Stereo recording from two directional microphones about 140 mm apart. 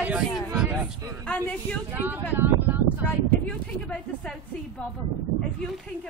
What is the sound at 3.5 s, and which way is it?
A man's voice, 5° left (ahead or behind).